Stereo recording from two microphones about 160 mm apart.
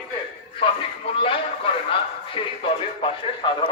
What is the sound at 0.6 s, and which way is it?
Speech, 35° left (ahead or behind).